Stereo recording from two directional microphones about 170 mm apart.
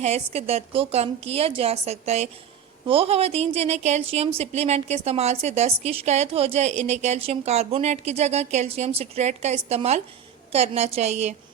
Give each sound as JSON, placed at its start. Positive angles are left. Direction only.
{"t": 0.0, "sound": "a woman's voice", "side_deg": -40}